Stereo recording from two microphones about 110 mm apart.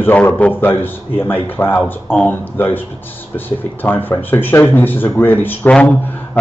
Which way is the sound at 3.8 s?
15° left (ahead or behind).